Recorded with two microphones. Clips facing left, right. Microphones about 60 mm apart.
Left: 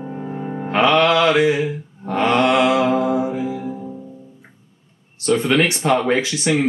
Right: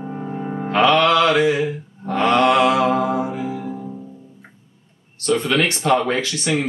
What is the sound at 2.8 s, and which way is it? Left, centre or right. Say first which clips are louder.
Mantra: left 1 dB; right.